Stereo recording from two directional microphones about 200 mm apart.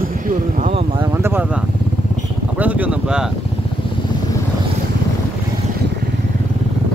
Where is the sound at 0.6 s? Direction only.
35° right (ahead or behind).